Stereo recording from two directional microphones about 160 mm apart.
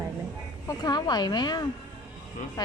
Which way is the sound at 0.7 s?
25° left (ahead or behind).